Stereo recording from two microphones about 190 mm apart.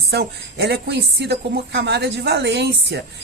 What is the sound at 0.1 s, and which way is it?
A woman's voice, 60° right (ahead or behind).